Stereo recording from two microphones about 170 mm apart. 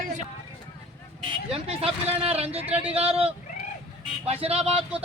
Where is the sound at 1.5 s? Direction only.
35° right (ahead or behind).